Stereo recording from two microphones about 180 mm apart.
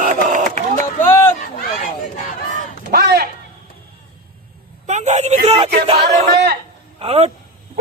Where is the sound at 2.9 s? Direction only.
60° right (ahead or behind).